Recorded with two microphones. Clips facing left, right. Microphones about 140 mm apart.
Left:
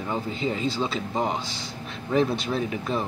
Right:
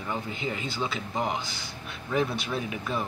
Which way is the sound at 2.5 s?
30° left (ahead or behind).